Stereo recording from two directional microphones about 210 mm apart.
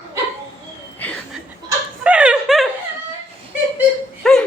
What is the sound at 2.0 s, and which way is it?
Speech, 5° right (ahead or behind).